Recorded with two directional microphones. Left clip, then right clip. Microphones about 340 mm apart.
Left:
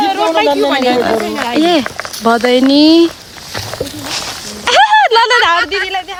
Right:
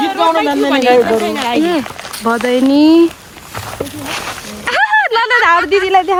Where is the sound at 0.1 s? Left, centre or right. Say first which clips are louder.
Even; left.